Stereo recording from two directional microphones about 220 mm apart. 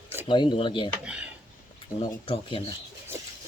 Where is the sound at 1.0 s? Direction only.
5° right (ahead or behind).